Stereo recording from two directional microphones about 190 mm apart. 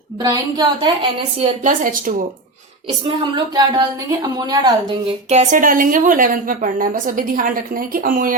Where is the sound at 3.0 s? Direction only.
25° right (ahead or behind).